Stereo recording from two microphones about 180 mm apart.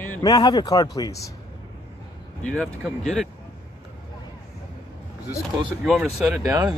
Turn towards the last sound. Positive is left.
turn(degrees=-15)  # may be behind; listen again after turning